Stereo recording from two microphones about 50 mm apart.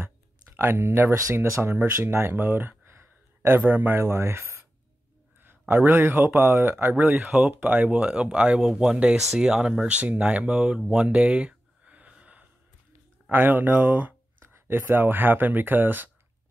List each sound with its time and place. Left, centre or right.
0.0 s a sound: right
1.3 s speech: right
2.3 s speech: right
2.8 s a sound: right
3.7 s speech: right
4.0 s speech: right
5.4 s a sound: right
5.9 s speech: right
7.2 s speech: centre
7.6 s speech: right
10.9 s a sound: right
13.3 s speech: right
14.4 s speech: right